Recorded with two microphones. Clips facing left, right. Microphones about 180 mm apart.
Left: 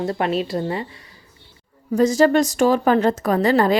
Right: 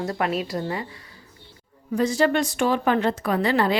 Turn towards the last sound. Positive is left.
turn(degrees=45)  # may be behind; listen again after turning